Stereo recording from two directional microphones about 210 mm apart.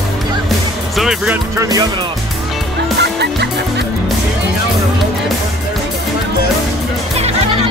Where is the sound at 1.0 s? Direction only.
5° right (ahead or behind).